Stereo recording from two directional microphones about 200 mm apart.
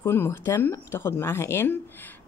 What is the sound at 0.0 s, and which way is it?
Speech, 10° left (ahead or behind).